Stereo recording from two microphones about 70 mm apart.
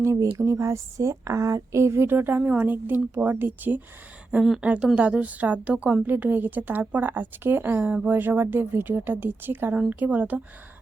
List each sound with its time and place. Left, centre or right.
0.0 s speech: right
4.4 s speech: centre
4.6 s a woman's voice: centre